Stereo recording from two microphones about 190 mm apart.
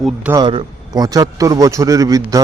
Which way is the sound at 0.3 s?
20° right (ahead or behind).